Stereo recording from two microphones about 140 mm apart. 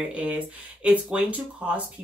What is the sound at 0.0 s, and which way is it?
Speech, 10° right (ahead or behind).